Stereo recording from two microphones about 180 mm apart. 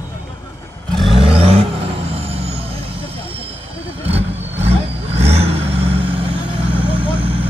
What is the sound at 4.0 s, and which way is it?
Vehicle, 35° right (ahead or behind).